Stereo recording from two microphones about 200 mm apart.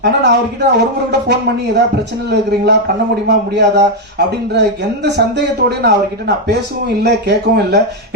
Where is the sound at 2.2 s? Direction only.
55° right (ahead or behind).